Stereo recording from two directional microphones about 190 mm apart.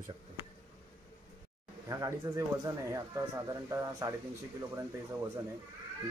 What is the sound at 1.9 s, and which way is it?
Speech, 15° right (ahead or behind).